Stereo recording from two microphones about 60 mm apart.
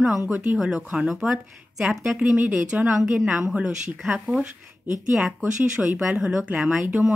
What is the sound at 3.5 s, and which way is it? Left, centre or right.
Speech, right.